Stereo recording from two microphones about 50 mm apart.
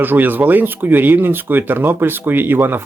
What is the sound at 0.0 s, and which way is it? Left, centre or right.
Speech, right.